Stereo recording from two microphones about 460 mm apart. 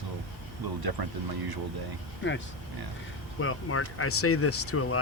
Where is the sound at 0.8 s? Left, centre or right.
Right.